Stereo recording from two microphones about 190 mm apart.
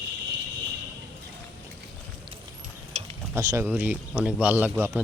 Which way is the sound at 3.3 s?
15° right (ahead or behind).